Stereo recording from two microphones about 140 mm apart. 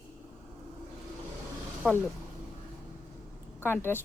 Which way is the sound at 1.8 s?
5° left (ahead or behind).